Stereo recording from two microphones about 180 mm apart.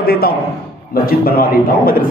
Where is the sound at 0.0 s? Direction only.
55° left (ahead or behind).